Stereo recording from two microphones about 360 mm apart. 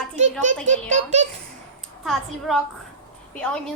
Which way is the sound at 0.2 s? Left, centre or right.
Centre.